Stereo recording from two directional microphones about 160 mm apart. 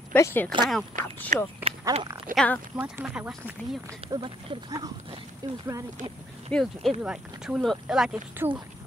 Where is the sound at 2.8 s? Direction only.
10° right (ahead or behind).